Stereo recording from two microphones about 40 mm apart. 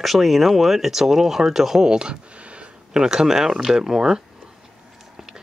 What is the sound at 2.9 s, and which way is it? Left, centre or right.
Speech, centre.